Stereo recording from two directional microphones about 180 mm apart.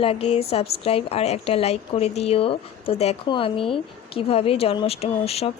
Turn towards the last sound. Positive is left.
turn(degrees=35)  # may be behind; listen again after turning